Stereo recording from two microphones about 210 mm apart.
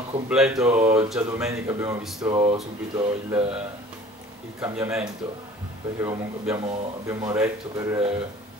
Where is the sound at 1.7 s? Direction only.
15° right (ahead or behind).